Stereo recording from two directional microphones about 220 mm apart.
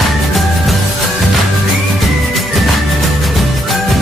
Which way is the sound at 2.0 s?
Centre (ahead or behind).